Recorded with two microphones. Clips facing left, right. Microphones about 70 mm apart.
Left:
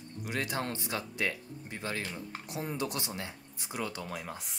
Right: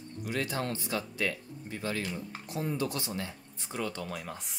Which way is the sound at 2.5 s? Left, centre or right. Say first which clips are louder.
Right 3 dB; centre.